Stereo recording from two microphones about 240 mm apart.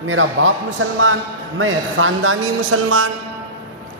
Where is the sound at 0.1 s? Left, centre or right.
Right.